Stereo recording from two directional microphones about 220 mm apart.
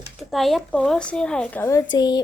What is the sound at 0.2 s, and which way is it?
A woman's voice, centre (ahead or behind).